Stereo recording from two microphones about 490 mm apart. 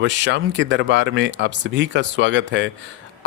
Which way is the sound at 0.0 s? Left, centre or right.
Right.